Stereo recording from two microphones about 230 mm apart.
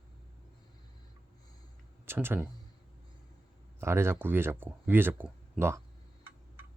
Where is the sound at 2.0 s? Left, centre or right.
Centre.